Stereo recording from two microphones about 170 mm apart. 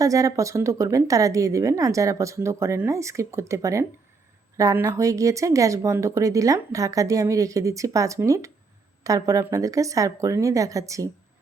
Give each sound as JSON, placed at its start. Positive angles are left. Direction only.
{"t": 0.0, "sound": "speech", "side_deg": -20}